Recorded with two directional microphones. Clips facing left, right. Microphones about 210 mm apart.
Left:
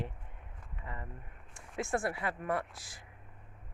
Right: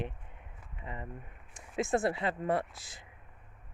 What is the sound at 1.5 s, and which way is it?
Speech, 20° right (ahead or behind).